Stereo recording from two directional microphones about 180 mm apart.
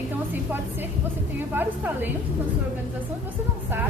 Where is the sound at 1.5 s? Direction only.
10° right (ahead or behind).